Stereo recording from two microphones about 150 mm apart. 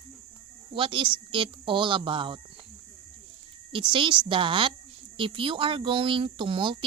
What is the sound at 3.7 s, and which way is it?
Speech, 35° right (ahead or behind).